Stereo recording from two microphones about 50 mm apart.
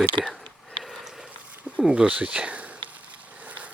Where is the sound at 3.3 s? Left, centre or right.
Right.